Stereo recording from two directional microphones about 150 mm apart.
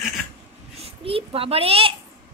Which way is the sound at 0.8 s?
40° right (ahead or behind).